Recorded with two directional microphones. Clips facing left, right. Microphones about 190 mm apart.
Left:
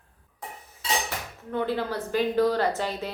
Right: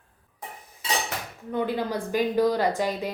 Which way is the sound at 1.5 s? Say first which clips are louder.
Right 1 dB; 15° right (ahead or behind).